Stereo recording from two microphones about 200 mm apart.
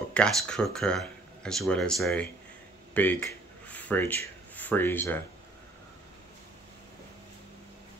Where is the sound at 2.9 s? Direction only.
10° left (ahead or behind).